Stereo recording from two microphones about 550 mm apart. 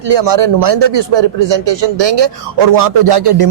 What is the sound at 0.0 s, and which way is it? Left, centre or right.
Speech, right.